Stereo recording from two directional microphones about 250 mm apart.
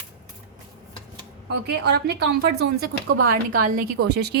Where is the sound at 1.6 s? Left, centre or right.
Right.